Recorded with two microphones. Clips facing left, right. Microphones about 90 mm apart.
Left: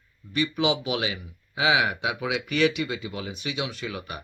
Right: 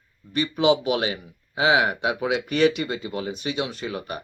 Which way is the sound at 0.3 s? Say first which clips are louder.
Right 4 dB; 35° right (ahead or behind).